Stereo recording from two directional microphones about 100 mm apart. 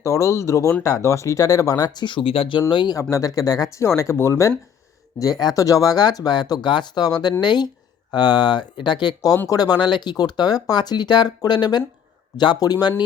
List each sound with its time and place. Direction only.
0.0 s speech: 30° left (ahead or behind); by 2.9 s 55° left (ahead or behind)
2.9 s speech: 35° left (ahead or behind)
5.2 s speech: 40° left (ahead or behind)